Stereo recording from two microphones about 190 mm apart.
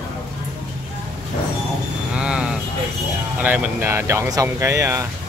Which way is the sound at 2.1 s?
5° right (ahead or behind).